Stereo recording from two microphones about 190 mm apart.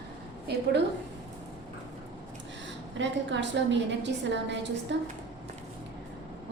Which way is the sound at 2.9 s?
70° right (ahead or behind).